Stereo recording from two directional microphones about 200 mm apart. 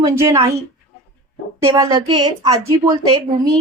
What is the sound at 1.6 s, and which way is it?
Speech, 20° right (ahead or behind).